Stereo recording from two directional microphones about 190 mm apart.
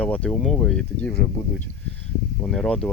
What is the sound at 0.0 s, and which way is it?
Speech, 5° left (ahead or behind).